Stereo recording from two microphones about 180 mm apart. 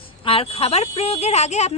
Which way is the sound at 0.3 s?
30° left (ahead or behind).